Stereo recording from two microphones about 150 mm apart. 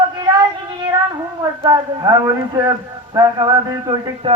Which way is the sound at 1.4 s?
25° right (ahead or behind).